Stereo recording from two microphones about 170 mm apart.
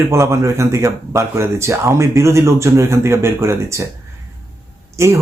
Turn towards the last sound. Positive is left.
turn(degrees=-15)  # may be behind; listen again after turning